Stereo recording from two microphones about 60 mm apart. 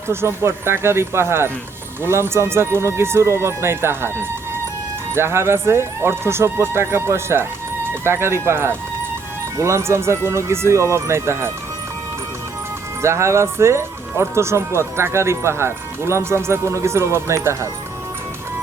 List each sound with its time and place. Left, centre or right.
0.1 s speech: right
13.0 s speech: right